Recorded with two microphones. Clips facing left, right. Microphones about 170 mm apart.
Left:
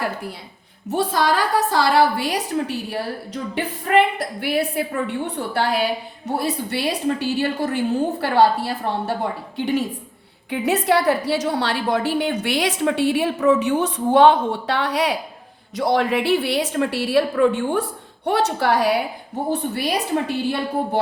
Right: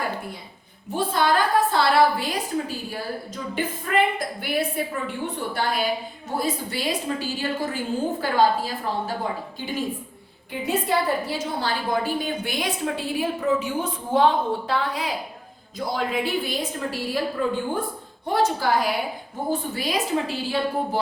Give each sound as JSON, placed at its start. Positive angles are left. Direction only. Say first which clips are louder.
{"t": 0.9, "sound": "a woman's voice", "louder": "left 2 dB", "side_deg": 80}